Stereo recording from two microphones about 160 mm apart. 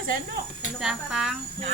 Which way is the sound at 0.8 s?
Centre (ahead or behind).